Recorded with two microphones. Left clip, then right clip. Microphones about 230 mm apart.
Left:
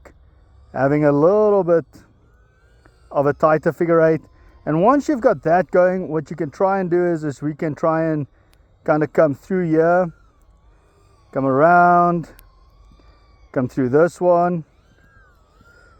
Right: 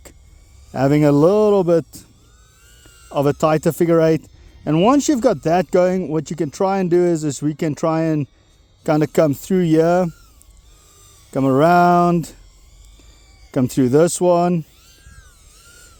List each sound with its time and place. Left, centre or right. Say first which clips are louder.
0.7 s speech: right 1 dB; right
3.1 s speech: left 1 dB; right
11.3 s speech: even; right
13.5 s speech: right 2 dB; right